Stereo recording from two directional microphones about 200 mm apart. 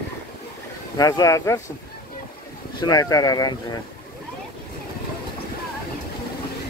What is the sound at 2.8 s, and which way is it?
Speech, 20° left (ahead or behind).